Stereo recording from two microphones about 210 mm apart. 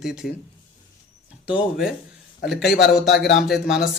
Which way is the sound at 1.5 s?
Centre (ahead or behind).